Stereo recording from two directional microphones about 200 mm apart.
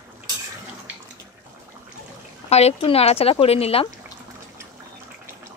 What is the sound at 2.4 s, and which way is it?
A woman's voice, 30° left (ahead or behind).